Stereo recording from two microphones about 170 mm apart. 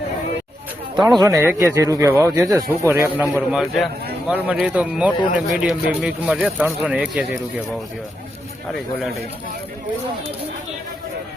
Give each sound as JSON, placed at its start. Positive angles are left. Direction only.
{"t": 1.1, "sound": "speech", "side_deg": -20}